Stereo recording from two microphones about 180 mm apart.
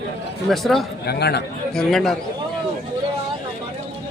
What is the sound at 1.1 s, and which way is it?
Speech, 65° left (ahead or behind).